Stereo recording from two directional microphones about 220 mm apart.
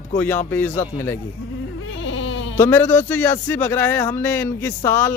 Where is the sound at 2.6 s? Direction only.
10° left (ahead or behind).